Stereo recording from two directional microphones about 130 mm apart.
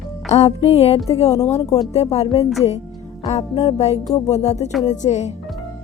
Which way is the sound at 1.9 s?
55° left (ahead or behind).